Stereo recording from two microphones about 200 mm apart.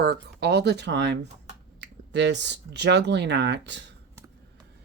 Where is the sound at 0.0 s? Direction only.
55° right (ahead or behind).